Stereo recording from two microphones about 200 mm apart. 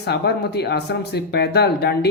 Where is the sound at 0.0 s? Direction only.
55° left (ahead or behind).